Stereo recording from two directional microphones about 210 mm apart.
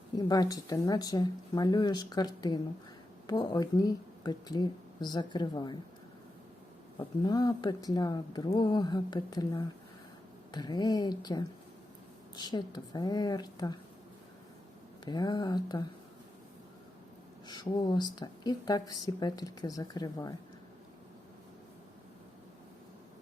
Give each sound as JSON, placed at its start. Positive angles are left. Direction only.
{"t": 0.2, "sound": "a woman's voice", "side_deg": 15}
{"t": 7.3, "sound": "a woman's voice", "side_deg": 20}
{"t": 15.0, "sound": "a woman's voice", "side_deg": 20}
{"t": 17.5, "sound": "a woman's voice", "side_deg": 20}